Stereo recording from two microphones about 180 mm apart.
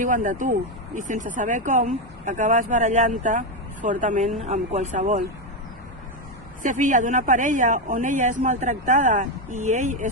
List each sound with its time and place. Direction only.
0.0 s speech: 45° right (ahead or behind)
6.6 s speech: 45° right (ahead or behind)